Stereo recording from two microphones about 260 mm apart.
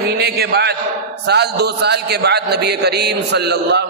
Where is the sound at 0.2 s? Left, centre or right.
Right.